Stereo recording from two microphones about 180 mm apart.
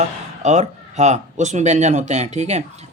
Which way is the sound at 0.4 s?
40° right (ahead or behind).